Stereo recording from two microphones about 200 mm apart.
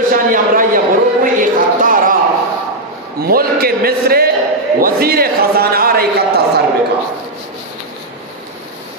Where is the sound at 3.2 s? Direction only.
50° right (ahead or behind).